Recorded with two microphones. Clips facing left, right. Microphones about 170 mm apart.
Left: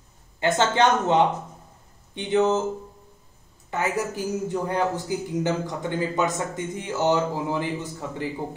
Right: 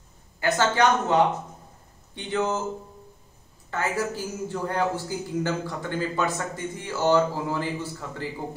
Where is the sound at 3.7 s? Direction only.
20° left (ahead or behind).